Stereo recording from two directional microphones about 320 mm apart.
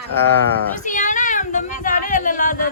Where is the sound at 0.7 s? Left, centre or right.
Left.